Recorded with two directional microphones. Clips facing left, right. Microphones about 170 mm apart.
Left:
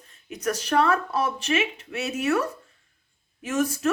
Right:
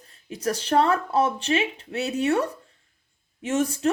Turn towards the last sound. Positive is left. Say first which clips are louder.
# right 1 dB
turn(degrees=-30)  # may be behind; listen again after turning